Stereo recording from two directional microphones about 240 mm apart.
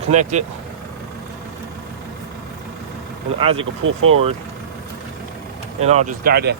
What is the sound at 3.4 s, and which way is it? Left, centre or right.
Speech, right.